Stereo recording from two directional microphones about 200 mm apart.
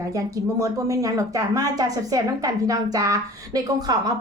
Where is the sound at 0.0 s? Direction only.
15° right (ahead or behind).